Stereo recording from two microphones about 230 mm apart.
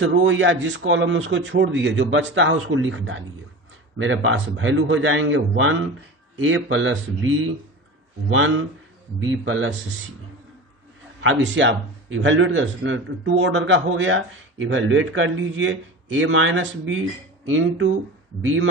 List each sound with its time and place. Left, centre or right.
0.0 s speech: right
11.2 s speech: right